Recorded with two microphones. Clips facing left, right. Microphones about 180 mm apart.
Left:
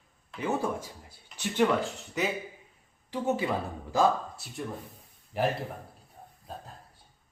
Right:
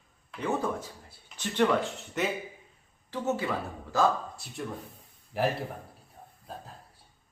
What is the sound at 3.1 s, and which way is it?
Speech, 15° left (ahead or behind).